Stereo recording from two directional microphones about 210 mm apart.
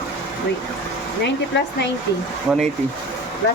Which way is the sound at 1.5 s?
55° left (ahead or behind).